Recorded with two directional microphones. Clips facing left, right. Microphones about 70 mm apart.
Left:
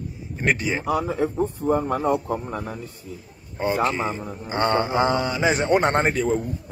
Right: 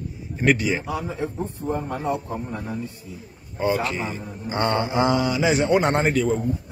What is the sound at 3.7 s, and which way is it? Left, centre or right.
Speech, left.